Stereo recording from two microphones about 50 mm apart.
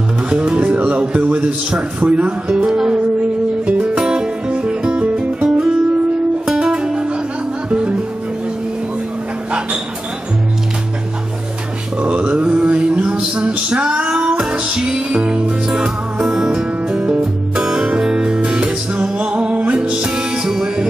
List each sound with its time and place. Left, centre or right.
0.3 s speech: centre
3.6 s music: right
12.0 s mantra: right
12.8 s music: right